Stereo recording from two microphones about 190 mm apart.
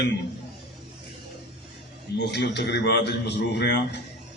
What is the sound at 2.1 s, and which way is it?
A man's voice, 65° left (ahead or behind).